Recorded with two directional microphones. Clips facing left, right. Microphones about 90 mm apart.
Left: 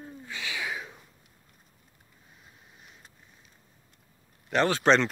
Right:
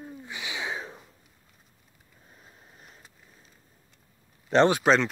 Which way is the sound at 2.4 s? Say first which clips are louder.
Right 2 dB; 40° right (ahead or behind).